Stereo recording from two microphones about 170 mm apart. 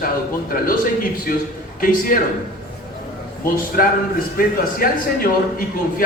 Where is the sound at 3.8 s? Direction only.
55° left (ahead or behind).